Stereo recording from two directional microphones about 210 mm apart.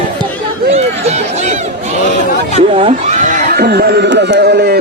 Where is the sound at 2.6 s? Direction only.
30° right (ahead or behind); by 4.8 s 50° right (ahead or behind).